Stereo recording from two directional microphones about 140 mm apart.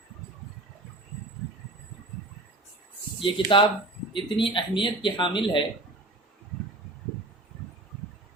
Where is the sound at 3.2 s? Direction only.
35° left (ahead or behind).